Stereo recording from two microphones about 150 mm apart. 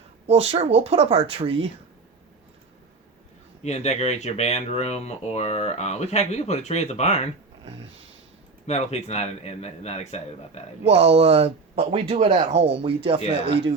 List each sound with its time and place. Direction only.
0.3 s speech: 40° right (ahead or behind)
3.6 s speech: 50° left (ahead or behind)
8.6 s speech: 45° left (ahead or behind)
10.8 s speech: 45° right (ahead or behind)